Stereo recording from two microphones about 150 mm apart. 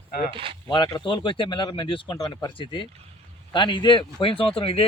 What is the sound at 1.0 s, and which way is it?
Speech, 35° left (ahead or behind).